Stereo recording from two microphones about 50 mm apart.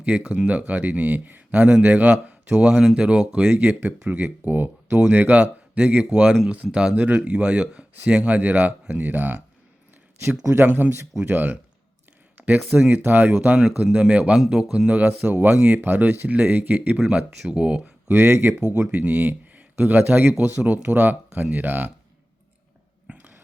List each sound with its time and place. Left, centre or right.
0.0 s speech: right
2.1 s speech: right
4.2 s speech: right
5.3 s a man's voice: right
6.9 s speech: right
10.2 s speech: right
13.6 s speech: centre
14.8 s speech: right
15.4 s speech: right
17.0 s speech: right
18.1 s speech: right
18.9 s speech: right
23.1 s a sound: right